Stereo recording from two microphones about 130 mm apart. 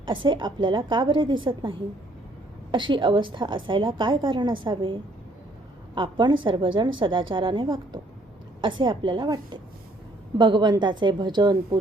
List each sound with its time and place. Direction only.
0.0 s a woman's voice: 40° right (ahead or behind)
2.7 s a woman's voice: 40° right (ahead or behind)
5.9 s a woman's voice: 35° right (ahead or behind)